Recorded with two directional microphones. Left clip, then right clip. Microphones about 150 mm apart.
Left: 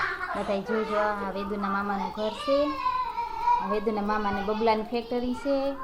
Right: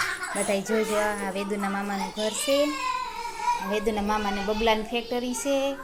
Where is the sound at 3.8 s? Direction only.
Centre (ahead or behind).